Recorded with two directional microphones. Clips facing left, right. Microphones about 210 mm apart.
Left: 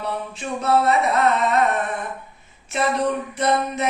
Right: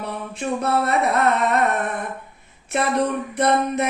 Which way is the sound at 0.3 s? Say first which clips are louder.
Left 1 dB; 55° right (ahead or behind).